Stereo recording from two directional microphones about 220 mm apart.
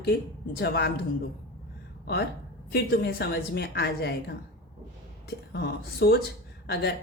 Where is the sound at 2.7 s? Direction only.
45° left (ahead or behind).